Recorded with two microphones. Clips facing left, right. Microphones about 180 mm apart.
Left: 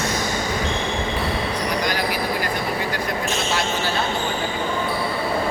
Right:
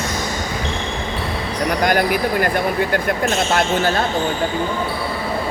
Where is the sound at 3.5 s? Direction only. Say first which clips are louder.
Right 6 dB; 55° right (ahead or behind).